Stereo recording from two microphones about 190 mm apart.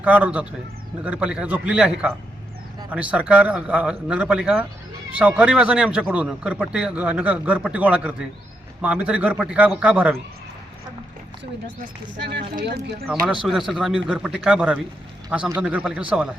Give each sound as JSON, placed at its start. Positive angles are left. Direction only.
{"t": 0.0, "sound": "a man's voice", "side_deg": -10}
{"t": 12.3, "sound": "speech", "side_deg": -60}
{"t": 13.1, "sound": "a man's voice", "side_deg": -5}